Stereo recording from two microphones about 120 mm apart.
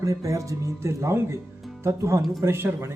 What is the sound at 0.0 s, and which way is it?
Speech, 25° right (ahead or behind).